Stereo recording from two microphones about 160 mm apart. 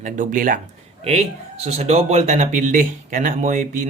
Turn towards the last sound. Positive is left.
turn(degrees=-50)  # may be behind; listen again after turning